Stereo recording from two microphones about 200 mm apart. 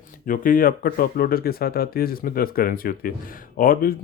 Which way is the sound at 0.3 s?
45° left (ahead or behind).